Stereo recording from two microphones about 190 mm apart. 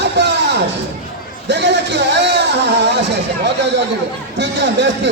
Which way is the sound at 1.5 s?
65° right (ahead or behind).